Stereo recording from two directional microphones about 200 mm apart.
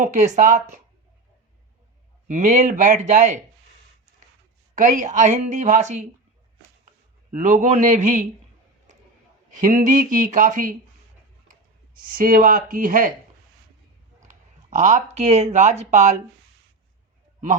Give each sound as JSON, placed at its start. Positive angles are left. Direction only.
{"t": 0.0, "sound": "speech", "side_deg": -40}
{"t": 2.2, "sound": "speech", "side_deg": -40}
{"t": 4.7, "sound": "speech", "side_deg": -40}
{"t": 7.3, "sound": "speech", "side_deg": -40}
{"t": 9.6, "sound": "speech", "side_deg": -40}
{"t": 11.9, "sound": "speech", "side_deg": -45}
{"t": 14.7, "sound": "speech", "side_deg": -35}